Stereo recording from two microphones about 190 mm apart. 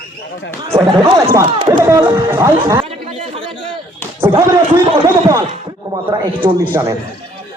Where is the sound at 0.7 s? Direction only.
15° right (ahead or behind).